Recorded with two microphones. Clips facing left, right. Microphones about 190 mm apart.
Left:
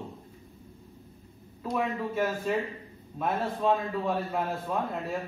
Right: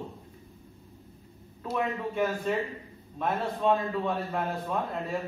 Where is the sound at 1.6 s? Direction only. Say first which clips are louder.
Even; centre (ahead or behind).